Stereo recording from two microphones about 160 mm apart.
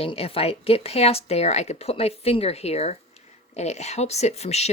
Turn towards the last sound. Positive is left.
turn(degrees=45)  # may be behind; listen again after turning